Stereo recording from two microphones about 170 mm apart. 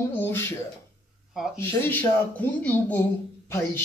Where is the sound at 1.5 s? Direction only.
10° left (ahead or behind).